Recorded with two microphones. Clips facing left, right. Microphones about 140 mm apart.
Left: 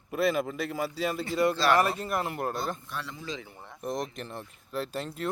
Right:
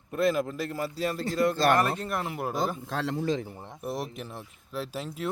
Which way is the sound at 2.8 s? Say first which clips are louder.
Right 9 dB; 90° right.